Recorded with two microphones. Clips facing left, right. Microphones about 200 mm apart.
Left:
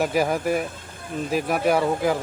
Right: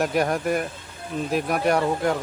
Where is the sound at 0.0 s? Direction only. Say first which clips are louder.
Left 1 dB; centre (ahead or behind).